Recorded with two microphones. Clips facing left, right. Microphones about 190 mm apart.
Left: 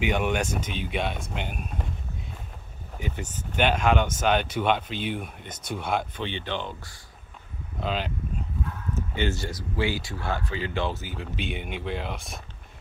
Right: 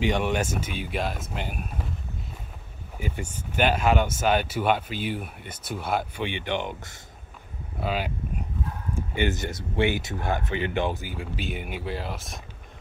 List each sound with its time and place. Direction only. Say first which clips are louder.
0.0 s speech: right 1 dB; centre (ahead or behind)
3.0 s speech: right 1 dB; 10° right (ahead or behind)
7.8 s speech: right 1 dB; 10° right (ahead or behind)
9.1 s speech: right 2 dB; 15° right (ahead or behind)
11.1 s speech: even; 5° right (ahead or behind)